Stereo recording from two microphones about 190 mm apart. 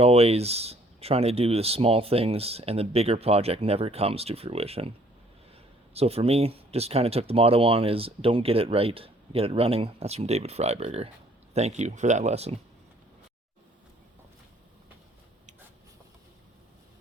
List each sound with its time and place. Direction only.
0.0 s speech: 35° right (ahead or behind)
5.9 s speech: 30° right (ahead or behind)